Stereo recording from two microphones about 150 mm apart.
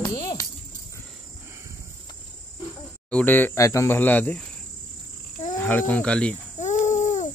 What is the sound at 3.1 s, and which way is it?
Speech, 15° left (ahead or behind).